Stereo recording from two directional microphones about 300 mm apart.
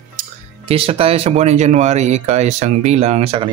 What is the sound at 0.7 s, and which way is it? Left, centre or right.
Speech, centre.